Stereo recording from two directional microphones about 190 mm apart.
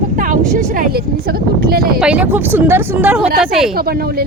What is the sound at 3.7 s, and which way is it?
Speech, 55° right (ahead or behind).